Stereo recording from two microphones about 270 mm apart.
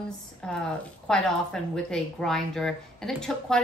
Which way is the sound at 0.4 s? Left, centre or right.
Centre.